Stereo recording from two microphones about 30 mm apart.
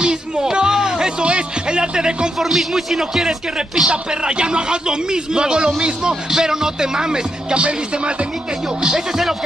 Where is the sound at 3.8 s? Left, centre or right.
Right.